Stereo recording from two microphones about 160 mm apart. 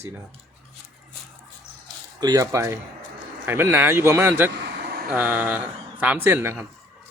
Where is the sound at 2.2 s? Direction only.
20° right (ahead or behind).